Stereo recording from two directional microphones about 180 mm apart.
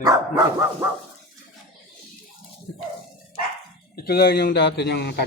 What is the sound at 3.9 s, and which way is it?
A man's voice, 60° left (ahead or behind).